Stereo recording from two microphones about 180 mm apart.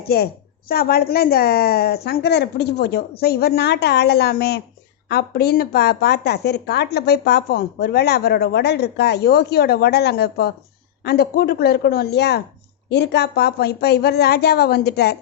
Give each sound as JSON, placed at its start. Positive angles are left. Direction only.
{"t": 0.1, "sound": "speech", "side_deg": 60}